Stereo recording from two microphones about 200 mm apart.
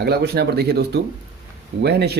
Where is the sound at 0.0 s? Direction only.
55° right (ahead or behind).